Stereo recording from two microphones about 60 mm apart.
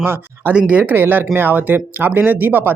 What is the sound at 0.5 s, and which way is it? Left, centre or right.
Speech, right.